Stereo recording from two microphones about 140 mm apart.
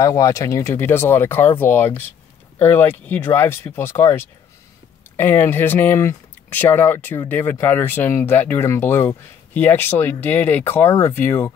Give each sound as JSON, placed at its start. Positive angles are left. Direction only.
{"t": 0.0, "sound": "speech", "side_deg": 20}